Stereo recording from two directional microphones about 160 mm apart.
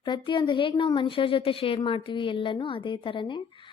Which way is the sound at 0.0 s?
30° left (ahead or behind).